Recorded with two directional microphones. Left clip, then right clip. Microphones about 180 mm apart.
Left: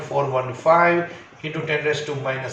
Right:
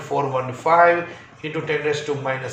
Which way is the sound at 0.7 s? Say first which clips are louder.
Right 1 dB; 45° right (ahead or behind).